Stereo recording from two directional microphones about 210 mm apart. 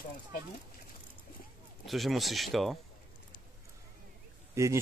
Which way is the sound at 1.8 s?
Centre (ahead or behind).